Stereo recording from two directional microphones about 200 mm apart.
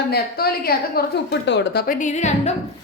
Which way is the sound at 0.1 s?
50° left (ahead or behind).